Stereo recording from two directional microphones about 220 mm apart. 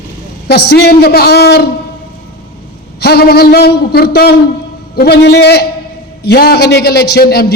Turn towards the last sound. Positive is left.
turn(degrees=45)  # may be behind; listen again after turning